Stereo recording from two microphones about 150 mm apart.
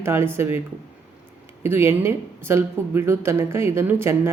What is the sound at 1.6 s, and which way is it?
Speech, 15° right (ahead or behind).